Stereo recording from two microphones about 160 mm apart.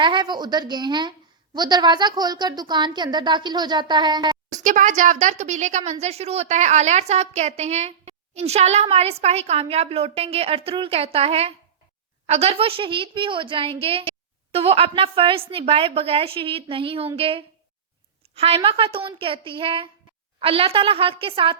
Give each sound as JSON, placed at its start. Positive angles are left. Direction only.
{"t": 0.0, "sound": "a woman's voice", "side_deg": -30}
{"t": 4.4, "sound": "a woman's voice", "side_deg": -50}